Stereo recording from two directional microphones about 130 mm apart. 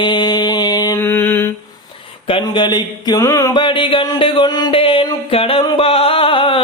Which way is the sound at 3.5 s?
40° left (ahead or behind).